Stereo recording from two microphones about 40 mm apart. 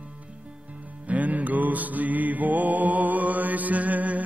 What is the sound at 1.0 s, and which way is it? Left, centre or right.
Music, right.